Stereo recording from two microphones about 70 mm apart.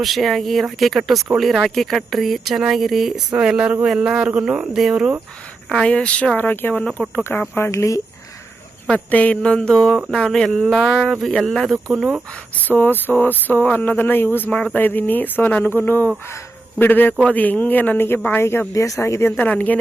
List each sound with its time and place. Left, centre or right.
0.0 s speech: centre
5.6 s speech: centre; by 6.8 s left
6.8 s speech: centre
7.5 s speech: left
9.0 s speech: left; by 12.0 s centre
12.5 s speech: left
14.5 s speech: centre
14.8 s speech: left
18.7 s speech: left
19.4 s speech: left